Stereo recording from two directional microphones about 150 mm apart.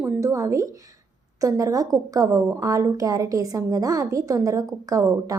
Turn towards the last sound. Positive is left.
turn(degrees=-20)  # may be behind; listen again after turning